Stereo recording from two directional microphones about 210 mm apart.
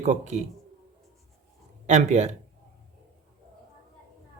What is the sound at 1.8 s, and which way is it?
Speech, 30° right (ahead or behind).